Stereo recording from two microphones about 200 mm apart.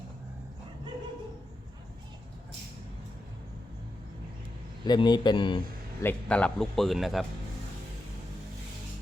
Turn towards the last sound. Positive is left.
turn(degrees=0)  # may be behind; listen again after turning